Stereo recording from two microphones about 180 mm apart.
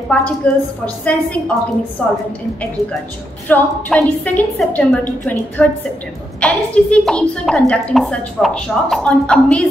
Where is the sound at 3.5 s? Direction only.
5° left (ahead or behind).